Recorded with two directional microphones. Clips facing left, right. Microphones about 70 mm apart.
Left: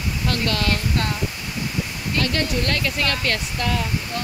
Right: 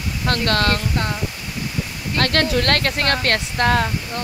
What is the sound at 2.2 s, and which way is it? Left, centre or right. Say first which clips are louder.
Speech: right 4 dB; right.